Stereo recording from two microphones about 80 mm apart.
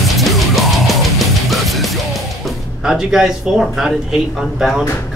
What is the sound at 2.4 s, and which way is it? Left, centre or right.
Speech, centre.